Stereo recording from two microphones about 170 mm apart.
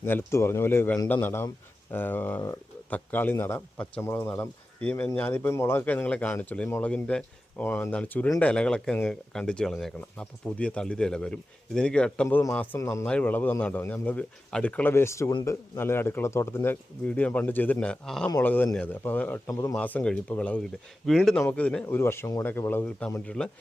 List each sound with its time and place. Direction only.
0.0 s speech: 15° left (ahead or behind)
19.7 s speech: 5° left (ahead or behind)